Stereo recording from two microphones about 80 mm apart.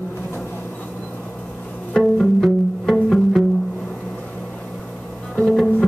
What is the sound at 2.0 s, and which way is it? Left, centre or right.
Music, centre.